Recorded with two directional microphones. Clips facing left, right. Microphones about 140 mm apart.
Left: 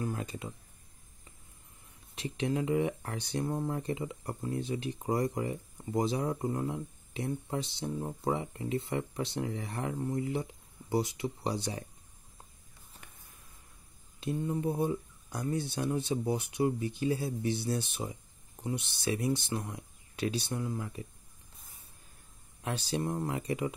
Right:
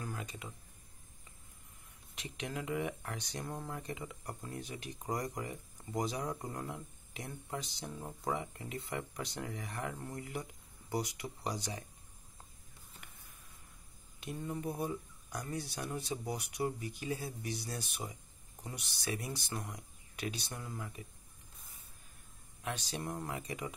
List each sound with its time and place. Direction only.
0.2 s speech: 35° left (ahead or behind)
2.1 s speech: 30° left (ahead or behind)
14.2 s speech: 25° left (ahead or behind)
22.6 s speech: 35° left (ahead or behind)